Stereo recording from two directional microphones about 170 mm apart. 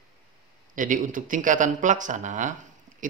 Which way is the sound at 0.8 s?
50° right (ahead or behind).